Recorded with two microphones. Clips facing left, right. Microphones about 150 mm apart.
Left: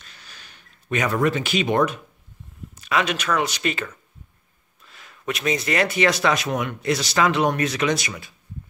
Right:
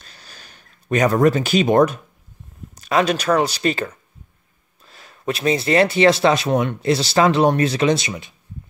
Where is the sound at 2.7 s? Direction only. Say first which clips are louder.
Right 5 dB; 40° right (ahead or behind).